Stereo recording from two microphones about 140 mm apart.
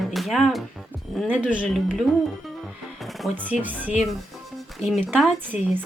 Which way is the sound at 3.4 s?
10° right (ahead or behind).